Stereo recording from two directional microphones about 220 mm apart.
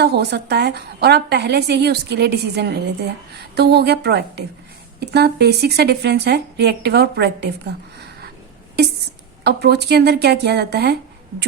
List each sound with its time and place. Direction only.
0.0 s a woman's voice: 50° right (ahead or behind)
9.4 s a woman's voice: 45° right (ahead or behind)